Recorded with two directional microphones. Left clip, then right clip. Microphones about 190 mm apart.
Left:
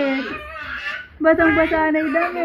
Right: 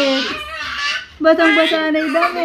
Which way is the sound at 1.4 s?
20° right (ahead or behind).